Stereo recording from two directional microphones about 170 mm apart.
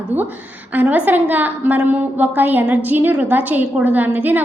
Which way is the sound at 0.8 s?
10° right (ahead or behind).